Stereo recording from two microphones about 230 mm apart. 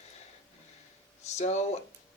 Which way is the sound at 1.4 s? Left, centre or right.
Left.